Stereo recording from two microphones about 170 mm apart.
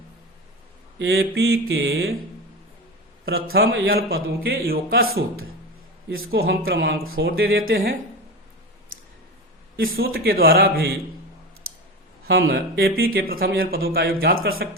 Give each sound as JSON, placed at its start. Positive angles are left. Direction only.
{"t": 0.9, "sound": "a man's voice", "side_deg": -75}
{"t": 3.2, "sound": "a man's voice", "side_deg": -70}
{"t": 9.7, "sound": "speech", "side_deg": -60}
{"t": 12.3, "sound": "speech", "side_deg": -70}